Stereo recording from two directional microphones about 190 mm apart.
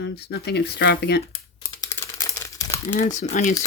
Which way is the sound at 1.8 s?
20° left (ahead or behind).